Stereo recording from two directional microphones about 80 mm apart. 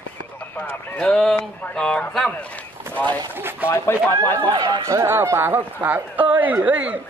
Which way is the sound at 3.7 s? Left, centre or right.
Left.